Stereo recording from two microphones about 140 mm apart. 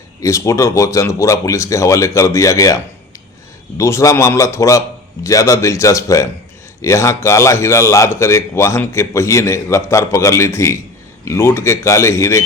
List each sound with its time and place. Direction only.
0.2 s speech: 20° left (ahead or behind)